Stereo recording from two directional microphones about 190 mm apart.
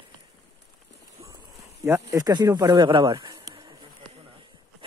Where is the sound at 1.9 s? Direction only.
20° right (ahead or behind).